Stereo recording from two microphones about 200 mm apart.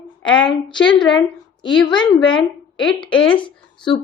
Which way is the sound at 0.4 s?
25° left (ahead or behind).